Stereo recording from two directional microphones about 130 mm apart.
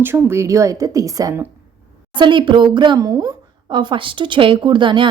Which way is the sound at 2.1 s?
40° right (ahead or behind).